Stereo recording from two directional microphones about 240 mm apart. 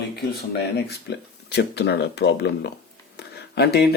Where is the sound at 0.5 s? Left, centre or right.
Left.